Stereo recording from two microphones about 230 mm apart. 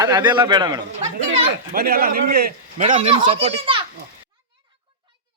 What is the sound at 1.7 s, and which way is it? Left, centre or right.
A man's voice, right.